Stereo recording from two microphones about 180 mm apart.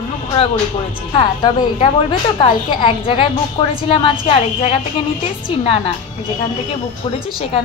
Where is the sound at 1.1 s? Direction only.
30° left (ahead or behind).